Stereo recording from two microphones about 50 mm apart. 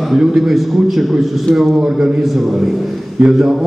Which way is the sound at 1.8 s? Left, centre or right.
Centre.